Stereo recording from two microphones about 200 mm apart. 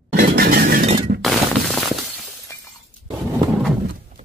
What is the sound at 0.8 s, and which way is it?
Shatter, 30° right (ahead or behind).